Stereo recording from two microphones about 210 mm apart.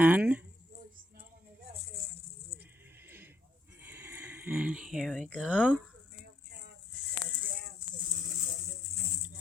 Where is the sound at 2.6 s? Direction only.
10° right (ahead or behind).